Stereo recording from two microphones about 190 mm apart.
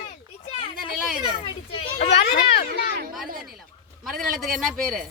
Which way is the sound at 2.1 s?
60° left (ahead or behind).